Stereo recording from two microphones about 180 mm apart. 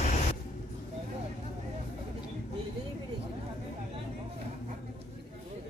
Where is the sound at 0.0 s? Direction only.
40° left (ahead or behind).